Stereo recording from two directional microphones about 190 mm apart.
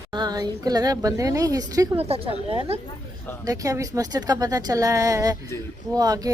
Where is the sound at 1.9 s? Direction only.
30° right (ahead or behind).